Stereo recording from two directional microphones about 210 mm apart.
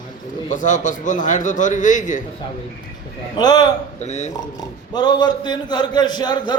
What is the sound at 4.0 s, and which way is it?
Speech, 35° left (ahead or behind).